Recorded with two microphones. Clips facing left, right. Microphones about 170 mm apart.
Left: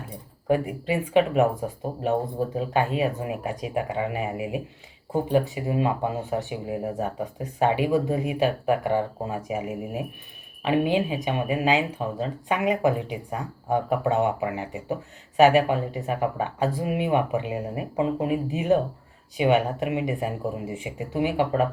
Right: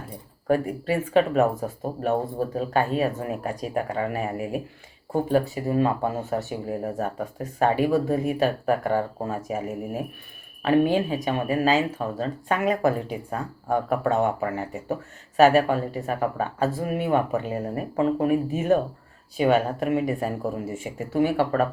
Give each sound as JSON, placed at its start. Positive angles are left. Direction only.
{"t": 0.9, "sound": "speech", "side_deg": 15}